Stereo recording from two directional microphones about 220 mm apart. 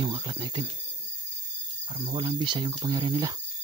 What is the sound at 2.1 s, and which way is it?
Speech, 20° right (ahead or behind).